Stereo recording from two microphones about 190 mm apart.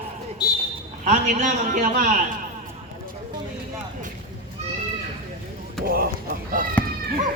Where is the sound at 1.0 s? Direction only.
40° right (ahead or behind).